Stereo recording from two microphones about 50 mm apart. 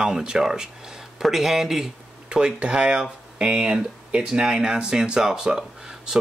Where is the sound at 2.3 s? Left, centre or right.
Centre.